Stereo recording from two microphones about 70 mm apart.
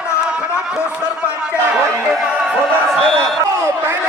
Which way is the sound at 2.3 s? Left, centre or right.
Centre.